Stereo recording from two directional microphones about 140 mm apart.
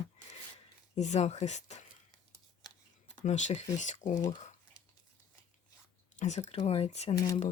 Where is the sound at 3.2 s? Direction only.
60° left (ahead or behind).